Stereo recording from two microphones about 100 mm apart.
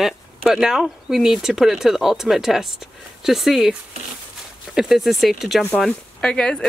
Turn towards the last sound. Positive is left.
turn(degrees=10)  # may be behind; listen again after turning